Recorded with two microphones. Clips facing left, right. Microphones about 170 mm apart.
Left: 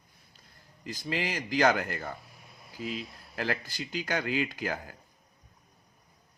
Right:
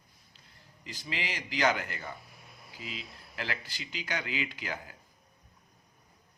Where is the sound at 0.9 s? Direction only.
45° left (ahead or behind).